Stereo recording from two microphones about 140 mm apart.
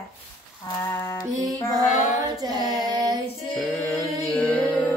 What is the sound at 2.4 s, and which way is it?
Female singing, 30° right (ahead or behind).